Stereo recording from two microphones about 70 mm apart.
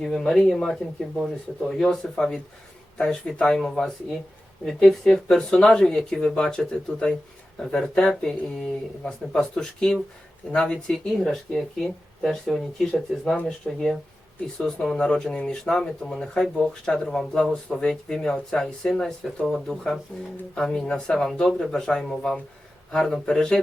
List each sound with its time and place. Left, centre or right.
0.0 s speech: centre
13.2 s speech: centre
13.7 s speech: centre